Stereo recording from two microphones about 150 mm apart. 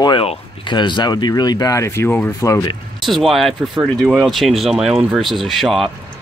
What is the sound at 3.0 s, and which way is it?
Speech, centre (ahead or behind).